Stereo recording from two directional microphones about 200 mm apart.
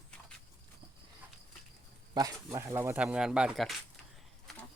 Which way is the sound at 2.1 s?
15° right (ahead or behind).